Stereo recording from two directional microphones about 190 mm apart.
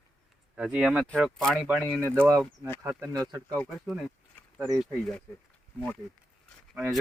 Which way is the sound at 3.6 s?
Centre (ahead or behind).